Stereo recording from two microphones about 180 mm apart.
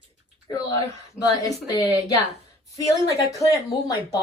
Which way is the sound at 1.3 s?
20° left (ahead or behind).